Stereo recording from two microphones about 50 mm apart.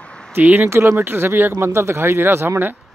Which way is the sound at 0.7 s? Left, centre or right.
Right.